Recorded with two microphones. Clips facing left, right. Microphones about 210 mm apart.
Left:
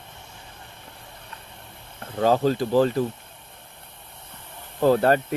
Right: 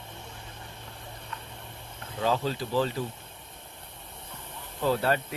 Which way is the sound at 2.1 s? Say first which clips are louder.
Left 8 dB; 45° left (ahead or behind).